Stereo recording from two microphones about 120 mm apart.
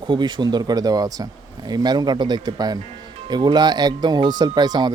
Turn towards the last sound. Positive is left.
turn(degrees=-35)  # may be behind; listen again after turning